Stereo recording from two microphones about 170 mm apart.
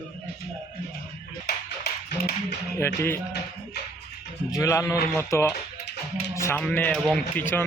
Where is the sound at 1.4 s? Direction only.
70° left (ahead or behind).